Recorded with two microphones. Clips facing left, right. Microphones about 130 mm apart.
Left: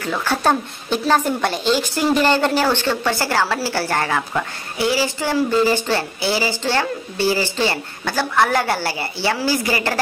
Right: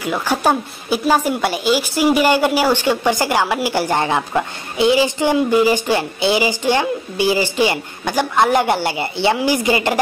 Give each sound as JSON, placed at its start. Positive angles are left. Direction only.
{"t": 0.0, "sound": "a woman's voice", "side_deg": -10}